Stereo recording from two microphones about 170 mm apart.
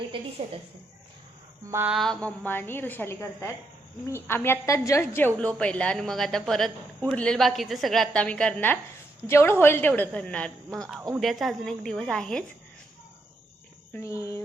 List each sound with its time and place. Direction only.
0.1 s a woman's voice: 35° right (ahead or behind)
1.7 s a sound: 10° right (ahead or behind)
2.0 s a woman's voice: 5° left (ahead or behind)
13.9 s a woman's voice: 15° left (ahead or behind)